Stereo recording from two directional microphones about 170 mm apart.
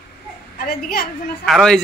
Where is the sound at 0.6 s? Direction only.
60° left (ahead or behind).